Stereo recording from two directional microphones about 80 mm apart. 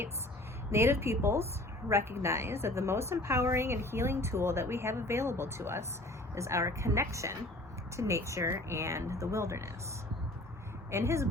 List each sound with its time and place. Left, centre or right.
0.7 s a woman's voice: right
10.9 s a woman's voice: right